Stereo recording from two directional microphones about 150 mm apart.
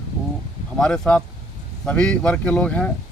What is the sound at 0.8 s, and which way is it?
Speech, 5° left (ahead or behind).